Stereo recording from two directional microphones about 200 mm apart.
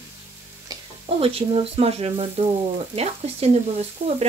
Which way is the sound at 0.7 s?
30° right (ahead or behind).